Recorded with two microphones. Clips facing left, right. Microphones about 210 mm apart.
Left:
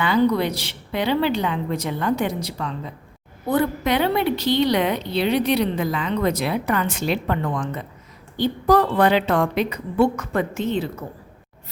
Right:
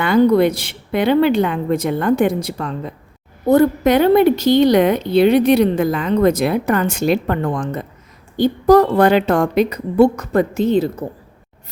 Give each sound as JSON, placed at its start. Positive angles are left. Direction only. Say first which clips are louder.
{"t": 0.0, "sound": "a woman's voice", "louder": "right 6 dB", "side_deg": -50}